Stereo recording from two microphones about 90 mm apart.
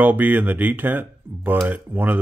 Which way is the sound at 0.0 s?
20° right (ahead or behind).